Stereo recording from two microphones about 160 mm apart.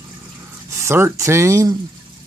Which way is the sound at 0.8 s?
15° right (ahead or behind).